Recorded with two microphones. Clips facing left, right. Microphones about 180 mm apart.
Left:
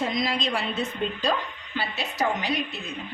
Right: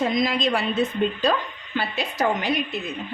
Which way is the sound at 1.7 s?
50° right (ahead or behind).